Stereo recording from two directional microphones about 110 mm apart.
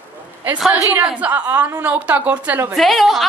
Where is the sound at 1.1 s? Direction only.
15° right (ahead or behind).